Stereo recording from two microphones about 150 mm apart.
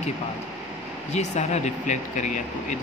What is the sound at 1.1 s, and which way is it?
Speech, 50° left (ahead or behind).